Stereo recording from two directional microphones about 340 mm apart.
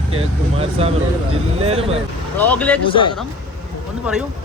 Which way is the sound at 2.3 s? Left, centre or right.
Centre.